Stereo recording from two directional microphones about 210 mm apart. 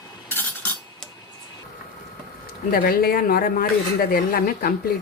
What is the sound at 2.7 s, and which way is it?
Speech, 45° left (ahead or behind).